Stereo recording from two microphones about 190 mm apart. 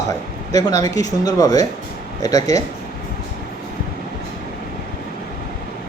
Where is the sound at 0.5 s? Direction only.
20° left (ahead or behind).